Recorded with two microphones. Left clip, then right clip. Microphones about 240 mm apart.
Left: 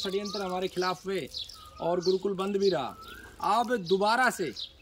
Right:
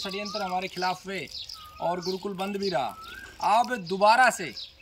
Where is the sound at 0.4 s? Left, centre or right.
Centre.